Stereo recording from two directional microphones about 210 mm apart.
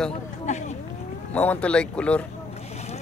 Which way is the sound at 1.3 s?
5° left (ahead or behind).